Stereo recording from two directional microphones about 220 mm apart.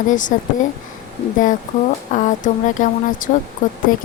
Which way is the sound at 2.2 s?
35° left (ahead or behind).